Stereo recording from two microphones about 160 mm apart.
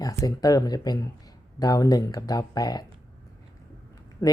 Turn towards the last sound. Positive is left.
turn(degrees=15)  # may be behind; listen again after turning